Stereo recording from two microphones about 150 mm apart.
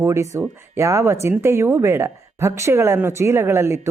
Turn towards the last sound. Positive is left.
turn(degrees=-20)  # may be behind; listen again after turning